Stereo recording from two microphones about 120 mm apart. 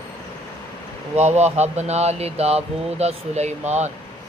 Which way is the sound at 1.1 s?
70° right (ahead or behind).